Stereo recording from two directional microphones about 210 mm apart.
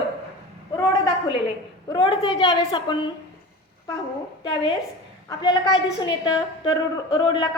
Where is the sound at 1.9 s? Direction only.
25° left (ahead or behind).